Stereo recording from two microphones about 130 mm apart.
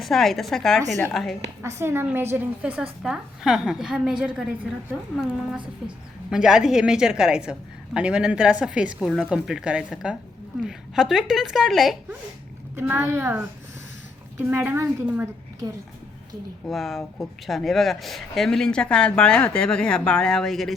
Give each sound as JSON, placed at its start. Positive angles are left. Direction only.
{"t": 0.0, "sound": "speech", "side_deg": 0}
{"t": 1.6, "sound": "a woman's voice", "side_deg": -20}
{"t": 6.3, "sound": "a woman's voice", "side_deg": -5}
{"t": 12.7, "sound": "a woman's voice", "side_deg": -15}
{"t": 14.4, "sound": "a woman's voice", "side_deg": -15}
{"t": 16.6, "sound": "speech", "side_deg": 0}